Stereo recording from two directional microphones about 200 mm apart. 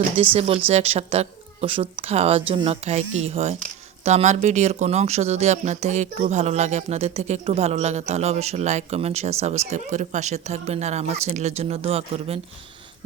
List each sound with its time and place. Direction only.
0.3 s speech: 30° right (ahead or behind)